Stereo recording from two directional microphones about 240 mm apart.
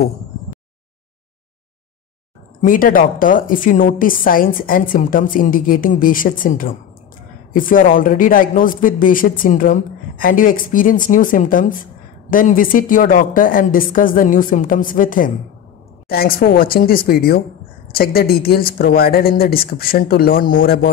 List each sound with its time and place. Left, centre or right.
2.6 s a woman's voice: left